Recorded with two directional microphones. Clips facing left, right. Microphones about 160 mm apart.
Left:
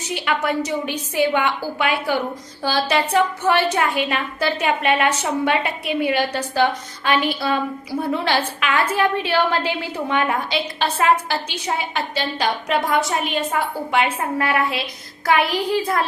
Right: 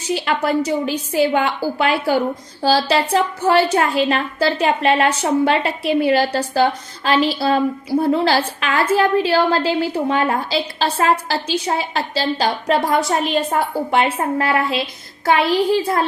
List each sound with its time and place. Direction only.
0.1 s a woman's voice: 35° right (ahead or behind)